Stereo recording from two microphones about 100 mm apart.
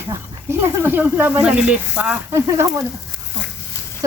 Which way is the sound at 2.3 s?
30° right (ahead or behind).